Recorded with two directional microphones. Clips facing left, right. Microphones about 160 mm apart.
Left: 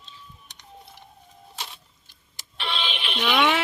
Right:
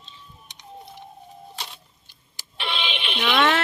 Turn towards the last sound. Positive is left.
turn(degrees=0)  # may be behind; listen again after turning